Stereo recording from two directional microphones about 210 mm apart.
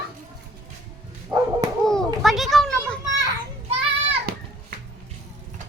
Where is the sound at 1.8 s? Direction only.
Centre (ahead or behind).